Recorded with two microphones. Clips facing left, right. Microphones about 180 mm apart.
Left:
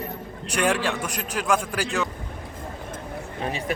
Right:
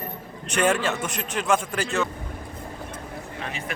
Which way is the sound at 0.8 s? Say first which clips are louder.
Even; 5° left (ahead or behind).